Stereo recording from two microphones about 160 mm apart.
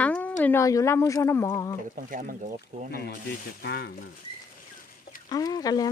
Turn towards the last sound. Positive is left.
turn(degrees=25)  # may be behind; listen again after turning